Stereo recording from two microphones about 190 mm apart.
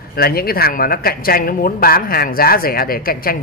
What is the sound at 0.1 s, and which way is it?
Speech, 50° left (ahead or behind).